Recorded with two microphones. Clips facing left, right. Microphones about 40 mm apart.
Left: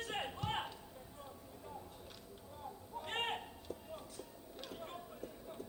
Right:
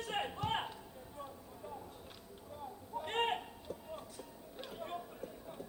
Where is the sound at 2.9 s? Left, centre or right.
Centre.